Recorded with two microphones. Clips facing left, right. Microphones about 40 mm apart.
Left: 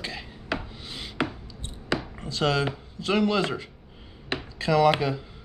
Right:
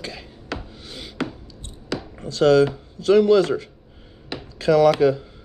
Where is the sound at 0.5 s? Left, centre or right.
Centre.